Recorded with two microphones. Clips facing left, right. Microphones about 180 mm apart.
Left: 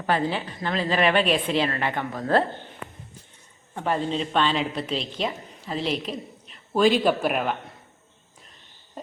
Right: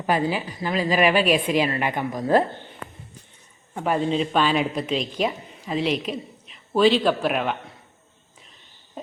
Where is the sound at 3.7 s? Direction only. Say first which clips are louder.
Right 3 dB; 5° right (ahead or behind).